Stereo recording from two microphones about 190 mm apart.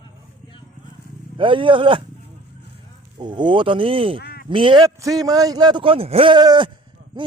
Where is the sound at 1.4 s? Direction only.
25° right (ahead or behind).